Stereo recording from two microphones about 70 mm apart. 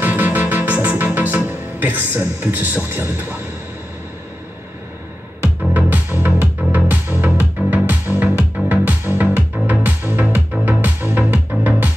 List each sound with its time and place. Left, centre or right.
0.0 s music: right
5.4 s music: right